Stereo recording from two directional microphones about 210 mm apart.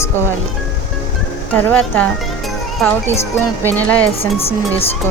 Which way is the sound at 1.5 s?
5° left (ahead or behind).